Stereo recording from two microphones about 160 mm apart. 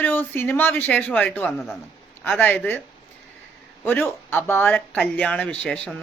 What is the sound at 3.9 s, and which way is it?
Speech, 15° left (ahead or behind).